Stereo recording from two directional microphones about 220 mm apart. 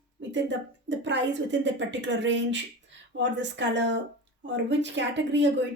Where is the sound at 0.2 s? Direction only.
55° right (ahead or behind).